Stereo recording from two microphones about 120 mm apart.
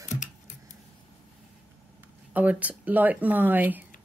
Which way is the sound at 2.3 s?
15° right (ahead or behind).